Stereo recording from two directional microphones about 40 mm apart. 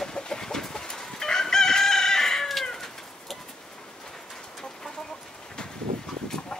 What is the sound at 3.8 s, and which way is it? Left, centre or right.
Bird, centre.